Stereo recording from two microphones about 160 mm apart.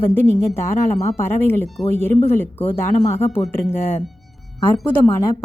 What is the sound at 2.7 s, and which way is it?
Speech, 45° left (ahead or behind).